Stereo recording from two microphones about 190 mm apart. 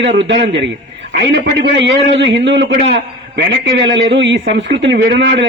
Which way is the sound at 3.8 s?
70° right (ahead or behind).